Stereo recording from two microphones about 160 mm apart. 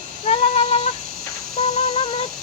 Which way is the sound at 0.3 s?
40° left (ahead or behind).